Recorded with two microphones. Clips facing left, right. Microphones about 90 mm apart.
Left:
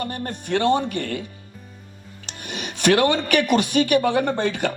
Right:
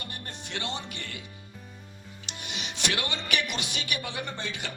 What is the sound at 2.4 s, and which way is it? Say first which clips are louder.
Speech: left 11 dB; 50° left (ahead or behind).